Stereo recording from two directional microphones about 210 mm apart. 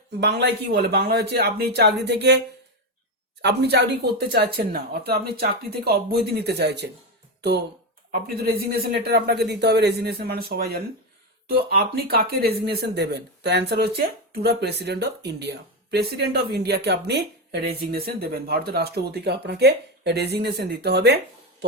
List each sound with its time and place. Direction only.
0.2 s speech: 55° right (ahead or behind)
3.4 s speech: 50° right (ahead or behind)
8.4 s speech: 45° right (ahead or behind)